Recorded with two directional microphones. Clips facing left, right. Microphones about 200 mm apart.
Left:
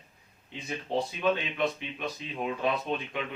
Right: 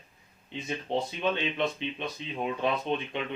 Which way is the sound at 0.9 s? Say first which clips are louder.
Left 2 dB; 25° right (ahead or behind).